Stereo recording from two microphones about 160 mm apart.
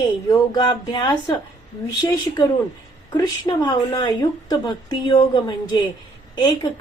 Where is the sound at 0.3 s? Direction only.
25° left (ahead or behind).